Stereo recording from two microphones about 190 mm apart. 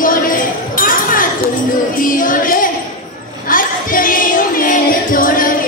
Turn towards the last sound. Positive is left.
turn(degrees=45)  # may be behind; listen again after turning